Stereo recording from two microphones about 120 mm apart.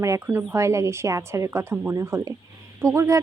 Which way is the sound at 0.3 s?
20° right (ahead or behind).